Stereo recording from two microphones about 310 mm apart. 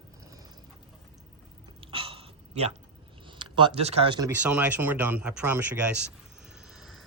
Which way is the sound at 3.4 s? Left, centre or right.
Centre.